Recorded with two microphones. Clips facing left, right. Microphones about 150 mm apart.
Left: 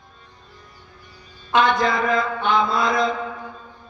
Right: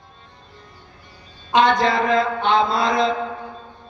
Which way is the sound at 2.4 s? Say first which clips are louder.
Right 2 dB; 30° right (ahead or behind).